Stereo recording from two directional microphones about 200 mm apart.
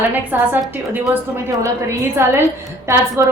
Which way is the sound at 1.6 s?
15° right (ahead or behind).